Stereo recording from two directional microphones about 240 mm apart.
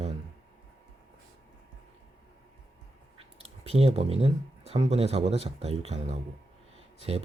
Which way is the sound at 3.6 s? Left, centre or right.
Right.